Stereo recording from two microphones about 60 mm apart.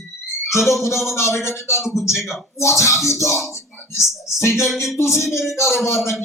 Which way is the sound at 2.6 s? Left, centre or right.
Left.